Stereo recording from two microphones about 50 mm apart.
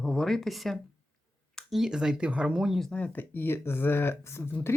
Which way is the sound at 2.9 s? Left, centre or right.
Left.